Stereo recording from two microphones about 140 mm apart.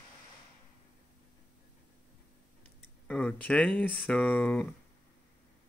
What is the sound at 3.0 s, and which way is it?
Speech, 5° left (ahead or behind).